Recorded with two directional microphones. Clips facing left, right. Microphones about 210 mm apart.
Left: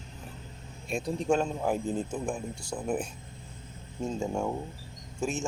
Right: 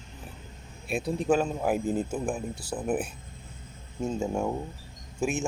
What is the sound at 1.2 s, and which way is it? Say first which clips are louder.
A man's voice: right 2 dB; 5° right (ahead or behind).